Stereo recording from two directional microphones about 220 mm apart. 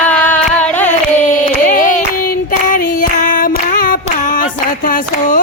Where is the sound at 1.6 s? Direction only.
35° left (ahead or behind).